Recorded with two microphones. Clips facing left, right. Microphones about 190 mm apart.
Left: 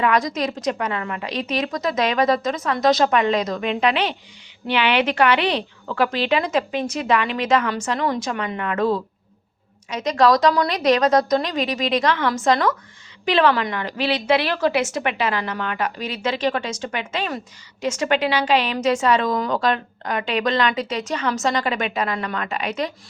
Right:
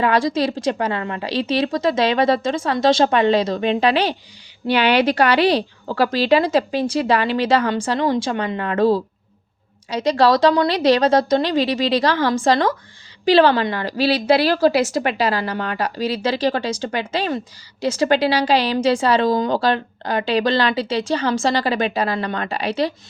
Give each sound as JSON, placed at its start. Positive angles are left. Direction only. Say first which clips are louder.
{"t": 0.0, "sound": "a woman's voice", "louder": "right 3 dB", "side_deg": -30}